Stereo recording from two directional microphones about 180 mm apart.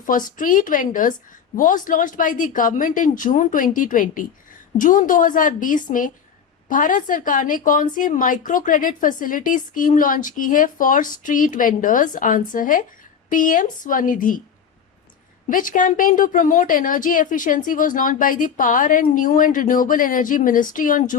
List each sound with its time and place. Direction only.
0.0 s a woman's voice: 50° left (ahead or behind)
15.4 s a woman's voice: 50° left (ahead or behind)